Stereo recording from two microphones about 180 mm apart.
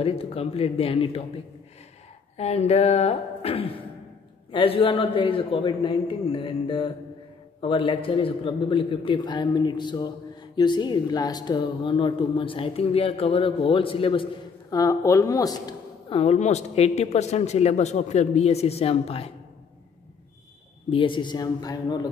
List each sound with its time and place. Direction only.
0.0 s speech: 30° left (ahead or behind)
2.3 s a man's voice: 35° left (ahead or behind)
14.7 s speech: 20° left (ahead or behind)
16.2 s speech: 40° left (ahead or behind)
20.9 s a man's voice: 30° left (ahead or behind)